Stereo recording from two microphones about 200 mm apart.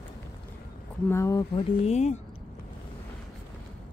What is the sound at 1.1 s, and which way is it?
Speech, 15° left (ahead or behind).